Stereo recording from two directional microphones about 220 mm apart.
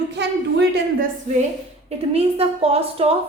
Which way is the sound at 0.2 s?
50° right (ahead or behind).